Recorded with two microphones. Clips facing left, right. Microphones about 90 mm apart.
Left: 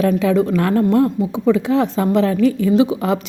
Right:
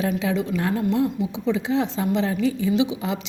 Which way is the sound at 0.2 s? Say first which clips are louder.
Left 8 dB; 50° left (ahead or behind).